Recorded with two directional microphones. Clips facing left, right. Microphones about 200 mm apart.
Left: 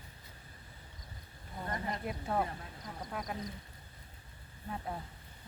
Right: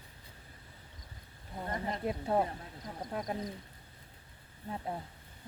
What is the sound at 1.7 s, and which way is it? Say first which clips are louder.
Speech: right 3 dB; 30° right (ahead or behind).